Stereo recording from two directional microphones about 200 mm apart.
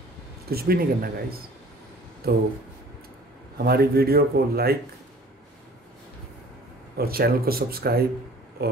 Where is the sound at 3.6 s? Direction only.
50° right (ahead or behind).